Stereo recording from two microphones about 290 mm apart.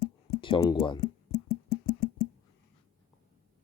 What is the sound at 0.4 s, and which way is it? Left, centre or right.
Speech, centre.